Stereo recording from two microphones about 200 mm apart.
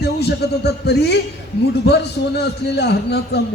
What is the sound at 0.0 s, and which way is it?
A man's voice, 55° left (ahead or behind).